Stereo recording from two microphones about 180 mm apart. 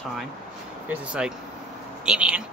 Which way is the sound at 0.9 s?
5° right (ahead or behind).